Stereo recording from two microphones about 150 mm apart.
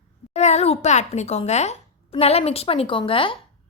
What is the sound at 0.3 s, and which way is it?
A woman's voice, 45° left (ahead or behind).